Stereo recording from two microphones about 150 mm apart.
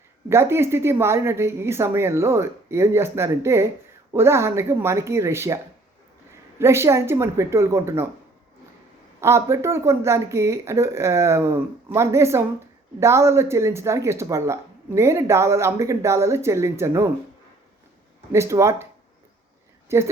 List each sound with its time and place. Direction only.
0.3 s a woman's voice: 15° right (ahead or behind)
6.6 s a woman's voice: 15° right (ahead or behind)
9.2 s a woman's voice: 20° right (ahead or behind)
18.3 s speech: 20° right (ahead or behind)
19.9 s a woman's voice: 15° right (ahead or behind)